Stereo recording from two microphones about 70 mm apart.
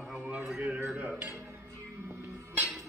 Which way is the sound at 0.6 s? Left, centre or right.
Centre.